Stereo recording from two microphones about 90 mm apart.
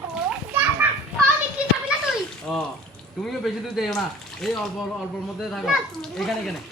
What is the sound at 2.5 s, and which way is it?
Speech, 5° left (ahead or behind).